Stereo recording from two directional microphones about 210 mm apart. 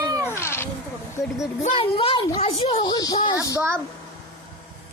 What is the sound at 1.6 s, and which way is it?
A woman's voice, 25° left (ahead or behind).